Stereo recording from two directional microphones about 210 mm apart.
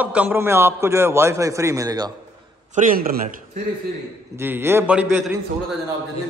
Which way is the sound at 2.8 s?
40° right (ahead or behind).